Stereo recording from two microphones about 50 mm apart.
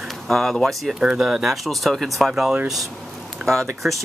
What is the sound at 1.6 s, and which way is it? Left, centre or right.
Speech, centre.